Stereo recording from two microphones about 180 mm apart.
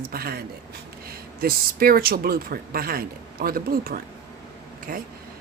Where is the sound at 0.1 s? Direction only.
55° right (ahead or behind).